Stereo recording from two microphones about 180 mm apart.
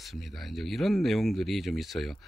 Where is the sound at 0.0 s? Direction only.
Centre (ahead or behind).